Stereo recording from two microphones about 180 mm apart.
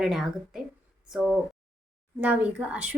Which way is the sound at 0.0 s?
Centre (ahead or behind).